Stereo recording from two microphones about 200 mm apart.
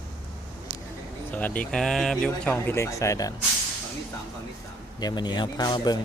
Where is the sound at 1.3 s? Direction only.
10° left (ahead or behind).